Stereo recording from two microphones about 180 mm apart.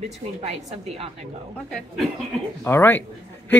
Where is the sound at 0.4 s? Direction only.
35° right (ahead or behind).